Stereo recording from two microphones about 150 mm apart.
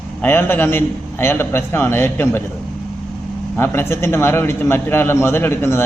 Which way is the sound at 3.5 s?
15° left (ahead or behind).